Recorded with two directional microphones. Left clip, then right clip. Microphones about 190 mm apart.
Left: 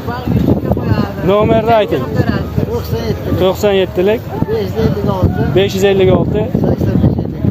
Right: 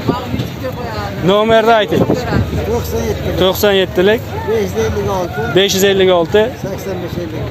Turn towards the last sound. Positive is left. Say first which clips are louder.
# right 2 dB
turn(degrees=5)  # may be behind; listen again after turning